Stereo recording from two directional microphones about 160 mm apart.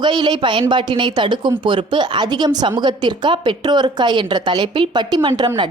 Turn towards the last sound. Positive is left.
turn(degrees=-30)  # may be behind; listen again after turning